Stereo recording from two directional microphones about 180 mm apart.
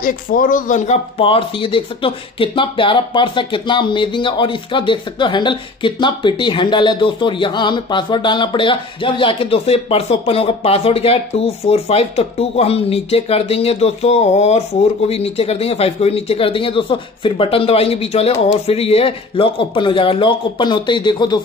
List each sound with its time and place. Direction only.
0.0 s speech: 50° left (ahead or behind); by 21.4 s 25° left (ahead or behind)